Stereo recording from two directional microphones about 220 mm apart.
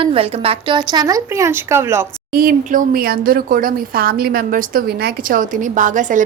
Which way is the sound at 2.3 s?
40° right (ahead or behind).